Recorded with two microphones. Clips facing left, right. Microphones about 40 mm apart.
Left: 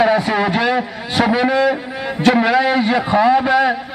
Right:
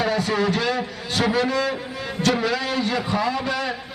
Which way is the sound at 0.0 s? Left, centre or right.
Left.